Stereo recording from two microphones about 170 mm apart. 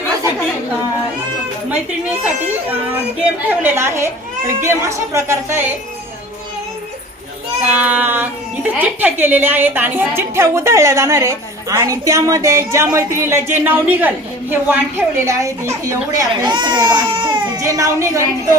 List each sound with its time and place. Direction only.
2.2 s a woman's voice: 10° right (ahead or behind)
7.7 s a woman's voice: 10° right (ahead or behind)